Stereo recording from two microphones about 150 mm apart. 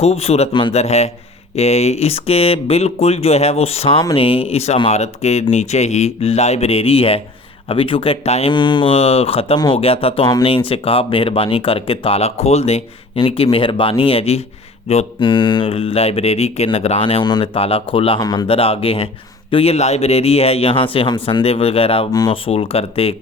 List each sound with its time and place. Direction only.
0.0 s speech: 45° left (ahead or behind)
18.2 s speech: 25° left (ahead or behind)
18.4 s speech: 40° left (ahead or behind)
22.1 s speech: 25° left (ahead or behind)
22.4 s speech: 40° left (ahead or behind)